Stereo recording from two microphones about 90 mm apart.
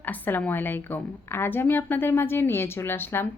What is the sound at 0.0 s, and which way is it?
A woman's voice, 20° left (ahead or behind).